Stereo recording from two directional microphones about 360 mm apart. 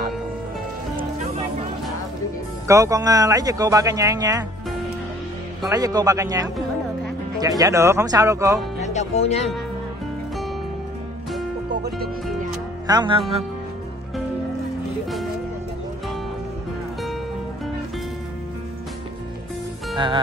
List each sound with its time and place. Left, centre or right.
2.7 s speech: centre
5.6 s speech: centre
8.8 s speech: centre
12.8 s speech: centre